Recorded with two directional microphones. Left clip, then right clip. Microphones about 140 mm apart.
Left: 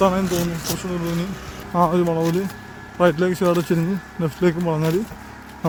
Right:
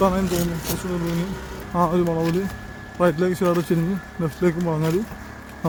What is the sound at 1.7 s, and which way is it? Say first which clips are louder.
Speech: left 2 dB; 15° left (ahead or behind).